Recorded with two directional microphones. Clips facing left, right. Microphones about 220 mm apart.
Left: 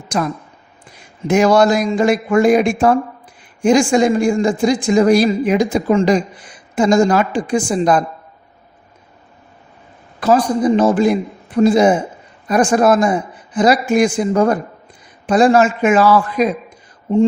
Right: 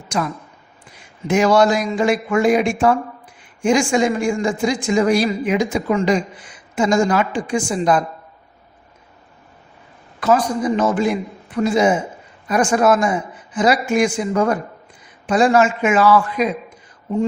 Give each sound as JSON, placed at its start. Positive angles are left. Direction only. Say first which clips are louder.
{"t": 1.3, "sound": "speech", "louder": "left 3 dB", "side_deg": 40}
{"t": 10.2, "sound": "speech", "louder": "left 3 dB", "side_deg": 35}